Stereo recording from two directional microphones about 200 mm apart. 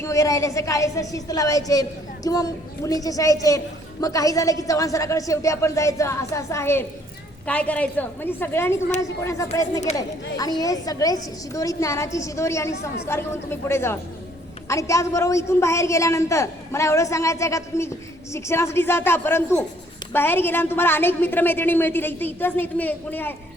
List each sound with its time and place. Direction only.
0.0 s a woman's voice: 15° left (ahead or behind)